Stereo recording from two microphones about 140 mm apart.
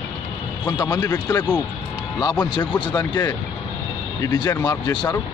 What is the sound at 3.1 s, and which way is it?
A man's voice, 25° left (ahead or behind).